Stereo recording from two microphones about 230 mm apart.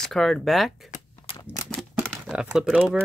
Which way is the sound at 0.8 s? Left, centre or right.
Left.